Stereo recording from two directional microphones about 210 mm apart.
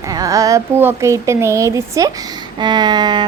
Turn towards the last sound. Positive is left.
turn(degrees=-20)  # may be behind; listen again after turning